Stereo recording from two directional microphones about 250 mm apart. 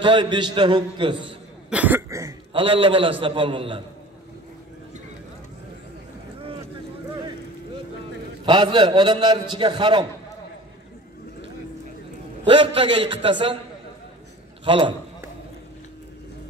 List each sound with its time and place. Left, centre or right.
0.0 s a man's voice: centre
1.7 s a man's voice: centre
8.5 s a man's voice: centre
12.4 s a man's voice: centre
14.6 s a man's voice: centre